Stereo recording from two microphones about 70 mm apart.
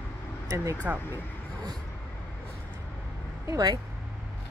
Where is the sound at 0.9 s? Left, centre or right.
Right.